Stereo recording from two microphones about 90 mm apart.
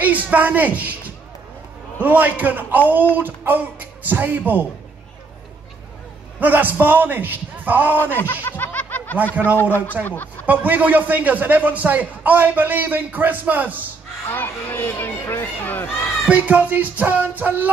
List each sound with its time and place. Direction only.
0.0 s a woman's voice: 15° right (ahead or behind)
6.4 s a man's voice: 20° right (ahead or behind)
8.2 s snicker: 25° left (ahead or behind)
10.0 s speech: 20° left (ahead or behind)
10.4 s a man's voice: 20° right (ahead or behind)
14.3 s speech: 20° left (ahead or behind)
16.3 s a man's voice: 15° right (ahead or behind)